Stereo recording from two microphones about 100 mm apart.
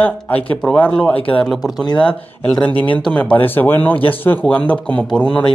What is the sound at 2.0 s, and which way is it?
Speech, 10° left (ahead or behind).